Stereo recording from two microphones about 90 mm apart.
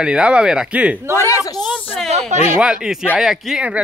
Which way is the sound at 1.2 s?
35° left (ahead or behind).